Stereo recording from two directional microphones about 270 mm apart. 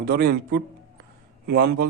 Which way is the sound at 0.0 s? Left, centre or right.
Right.